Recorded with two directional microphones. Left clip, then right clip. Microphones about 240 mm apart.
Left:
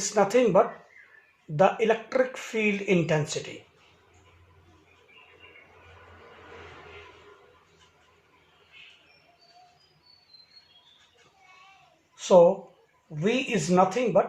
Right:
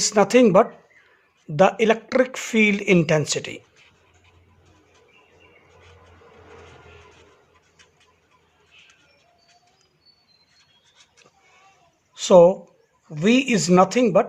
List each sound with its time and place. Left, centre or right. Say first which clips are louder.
0.0 s speech: right 6 dB; right
12.1 s speech: right 5 dB; right